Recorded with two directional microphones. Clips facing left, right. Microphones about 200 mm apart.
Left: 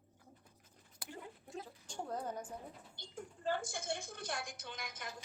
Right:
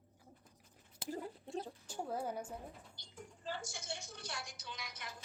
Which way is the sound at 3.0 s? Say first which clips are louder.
Left 5 dB; 55° left (ahead or behind).